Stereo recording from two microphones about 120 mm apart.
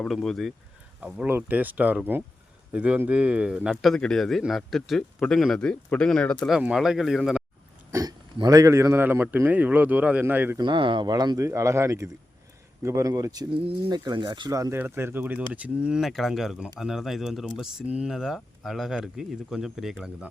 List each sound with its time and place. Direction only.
0.0 s speech: 5° left (ahead or behind)
1.0 s a man's voice: 10° right (ahead or behind); by 6.3 s 5° left (ahead or behind)
6.5 s speech: 5° right (ahead or behind)
7.9 s a man's voice: 25° right (ahead or behind)
10.6 s a man's voice: 40° right (ahead or behind); by 20.3 s 5° right (ahead or behind)